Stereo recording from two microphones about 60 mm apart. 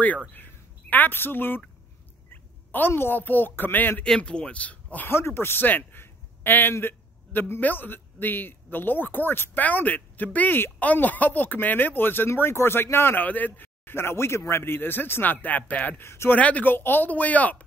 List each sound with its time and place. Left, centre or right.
0.3 s speech: left
2.3 s a sound: left
2.9 s speech: left
4.0 s speech: centre
4.9 s a man's voice: left
12.3 s speech: left
16.0 s speech: left
16.3 s speech: left
16.7 s speech: left